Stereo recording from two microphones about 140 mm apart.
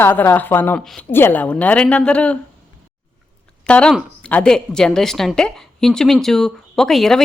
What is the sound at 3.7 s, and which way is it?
A woman's voice, 5° left (ahead or behind).